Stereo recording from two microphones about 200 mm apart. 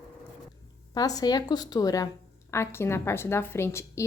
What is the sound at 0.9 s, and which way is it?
A woman's voice, 20° left (ahead or behind).